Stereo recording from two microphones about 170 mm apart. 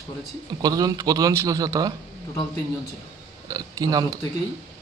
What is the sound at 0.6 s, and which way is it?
Speech, 20° right (ahead or behind).